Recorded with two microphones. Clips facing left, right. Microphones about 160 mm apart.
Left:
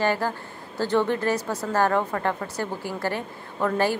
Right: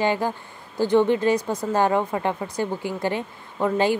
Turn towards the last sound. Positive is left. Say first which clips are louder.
# right 2 dB
turn(degrees=-15)  # may be behind; listen again after turning